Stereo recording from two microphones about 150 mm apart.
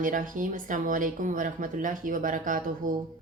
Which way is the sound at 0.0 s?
60° right (ahead or behind).